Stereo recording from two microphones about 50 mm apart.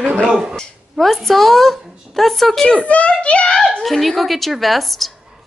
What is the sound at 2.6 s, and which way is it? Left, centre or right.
Speech, left.